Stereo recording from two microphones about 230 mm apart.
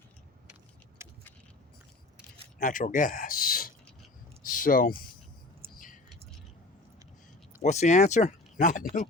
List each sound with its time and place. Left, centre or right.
1.0 s keys jangling: centre
2.6 s speech: left
4.4 s a sound: left
7.6 s speech: left